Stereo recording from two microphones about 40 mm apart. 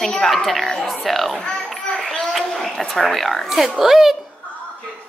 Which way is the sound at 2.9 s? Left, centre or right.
Centre.